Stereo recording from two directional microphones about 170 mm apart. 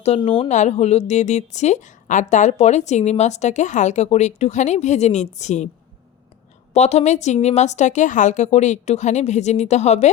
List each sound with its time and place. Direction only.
0.0 s a woman's voice: 35° left (ahead or behind)
0.5 s a woman's voice: 45° left (ahead or behind)
6.7 s a woman's voice: 40° left (ahead or behind)